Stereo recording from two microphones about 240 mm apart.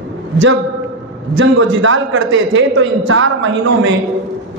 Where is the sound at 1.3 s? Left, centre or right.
Right.